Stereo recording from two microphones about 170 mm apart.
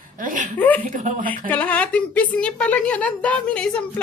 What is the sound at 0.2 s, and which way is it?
Speech, 50° right (ahead or behind).